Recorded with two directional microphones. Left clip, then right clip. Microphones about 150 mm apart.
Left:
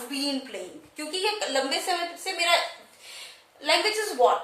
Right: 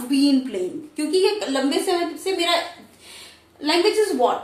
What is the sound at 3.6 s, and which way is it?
Speech, 10° right (ahead or behind).